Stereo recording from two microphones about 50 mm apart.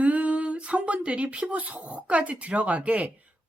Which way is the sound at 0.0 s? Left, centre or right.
Right.